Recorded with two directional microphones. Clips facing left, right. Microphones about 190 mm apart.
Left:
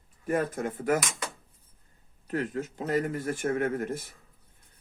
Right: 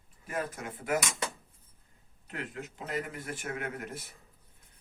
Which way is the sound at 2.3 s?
40° left (ahead or behind).